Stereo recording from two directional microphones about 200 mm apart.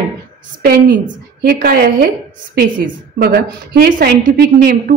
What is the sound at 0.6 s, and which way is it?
A woman's voice, 50° right (ahead or behind).